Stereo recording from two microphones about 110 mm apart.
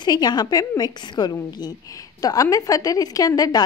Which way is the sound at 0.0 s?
40° left (ahead or behind).